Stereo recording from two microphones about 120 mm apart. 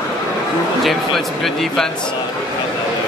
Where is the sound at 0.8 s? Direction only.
Centre (ahead or behind).